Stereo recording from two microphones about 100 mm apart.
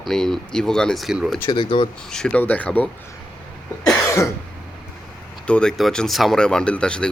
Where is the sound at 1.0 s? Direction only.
5° right (ahead or behind).